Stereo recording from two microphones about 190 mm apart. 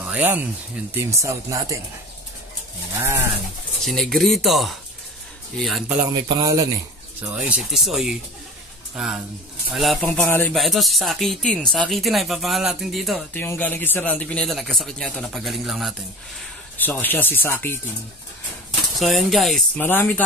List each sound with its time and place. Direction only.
0.0 s speech: 10° right (ahead or behind)
3.0 s speech: 10° right (ahead or behind)
3.8 s a man's voice: centre (ahead or behind)
6.2 s a man's voice: 15° right (ahead or behind); by 15.9 s centre (ahead or behind)
16.3 s speech: 10° left (ahead or behind)
18.9 s a man's voice: centre (ahead or behind)